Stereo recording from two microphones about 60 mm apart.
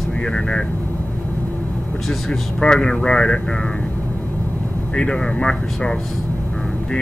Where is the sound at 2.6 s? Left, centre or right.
Centre.